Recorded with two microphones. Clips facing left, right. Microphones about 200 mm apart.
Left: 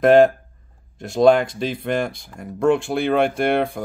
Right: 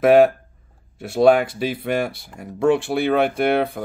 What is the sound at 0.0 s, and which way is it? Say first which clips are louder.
Speech: even; 5° right (ahead or behind).